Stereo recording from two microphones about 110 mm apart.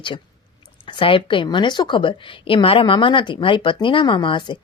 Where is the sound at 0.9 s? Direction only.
50° left (ahead or behind).